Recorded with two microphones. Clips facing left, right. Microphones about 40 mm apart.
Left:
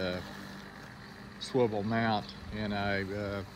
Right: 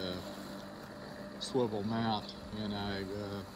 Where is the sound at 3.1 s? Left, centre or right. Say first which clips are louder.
Left 4 dB; left.